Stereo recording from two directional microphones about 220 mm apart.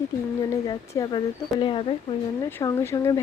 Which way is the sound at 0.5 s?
15° left (ahead or behind).